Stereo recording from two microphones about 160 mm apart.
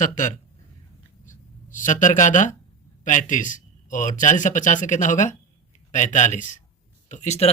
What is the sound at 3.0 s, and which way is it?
Speech, 50° left (ahead or behind).